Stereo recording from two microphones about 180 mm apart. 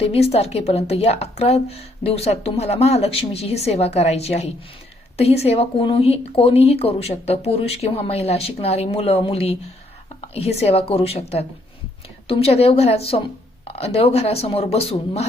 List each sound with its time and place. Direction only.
0.0 s a woman's voice: 35° left (ahead or behind)
10.2 s a sound: 35° left (ahead or behind)
10.6 s a woman's voice: 35° left (ahead or behind)